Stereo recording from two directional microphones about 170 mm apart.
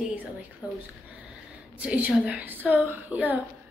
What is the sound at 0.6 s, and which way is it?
Speech, 20° left (ahead or behind).